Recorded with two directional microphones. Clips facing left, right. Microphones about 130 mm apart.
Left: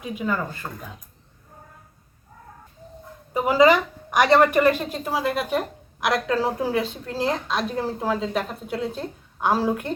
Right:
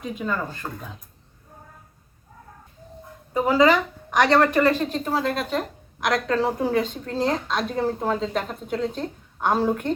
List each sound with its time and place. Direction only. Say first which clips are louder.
0.0 s speech: left 1 dB; 5° left (ahead or behind)
3.3 s a woman's voice: left 1 dB; 10° left (ahead or behind)